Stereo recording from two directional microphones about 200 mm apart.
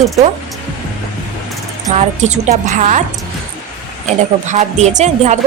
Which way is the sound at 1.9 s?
35° right (ahead or behind).